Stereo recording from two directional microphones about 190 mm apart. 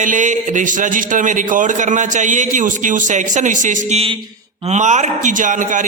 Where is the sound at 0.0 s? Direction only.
40° right (ahead or behind).